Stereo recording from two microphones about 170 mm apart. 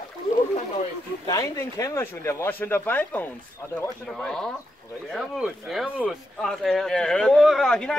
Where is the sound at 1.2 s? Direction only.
20° left (ahead or behind).